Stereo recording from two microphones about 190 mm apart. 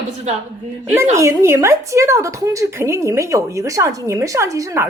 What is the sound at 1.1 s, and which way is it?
A woman's voice, 15° right (ahead or behind).